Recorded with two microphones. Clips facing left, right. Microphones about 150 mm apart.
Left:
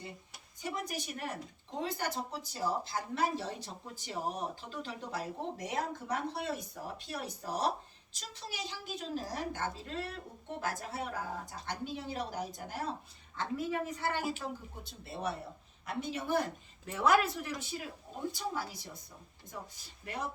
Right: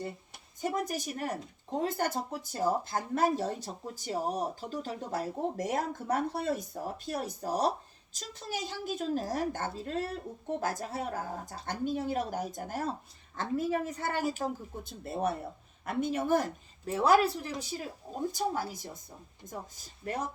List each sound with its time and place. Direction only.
0.6 s speech: 45° right (ahead or behind)
16.9 s speech: 30° right (ahead or behind)